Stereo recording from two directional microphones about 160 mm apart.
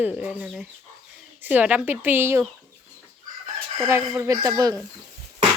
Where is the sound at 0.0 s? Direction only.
5° right (ahead or behind).